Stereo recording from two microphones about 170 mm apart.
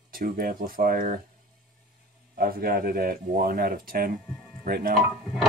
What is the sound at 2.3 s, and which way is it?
Speech, 60° right (ahead or behind).